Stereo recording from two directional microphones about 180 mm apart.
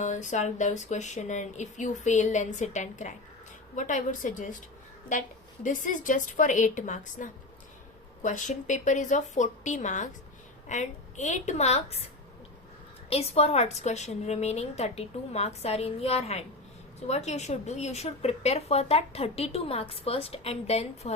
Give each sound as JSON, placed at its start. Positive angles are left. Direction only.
{"t": 0.0, "sound": "a woman's voice", "side_deg": 40}
{"t": 13.1, "sound": "a woman's voice", "side_deg": 35}